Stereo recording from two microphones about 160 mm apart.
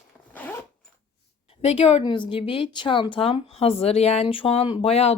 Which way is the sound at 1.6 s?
40° left (ahead or behind).